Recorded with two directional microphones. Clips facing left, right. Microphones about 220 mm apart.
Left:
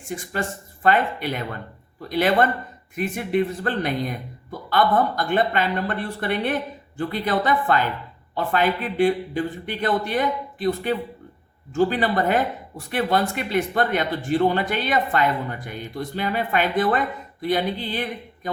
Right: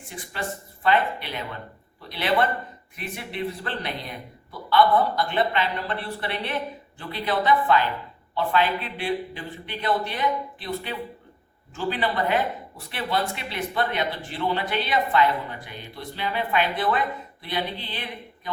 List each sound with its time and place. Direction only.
0.1 s speech: 45° left (ahead or behind)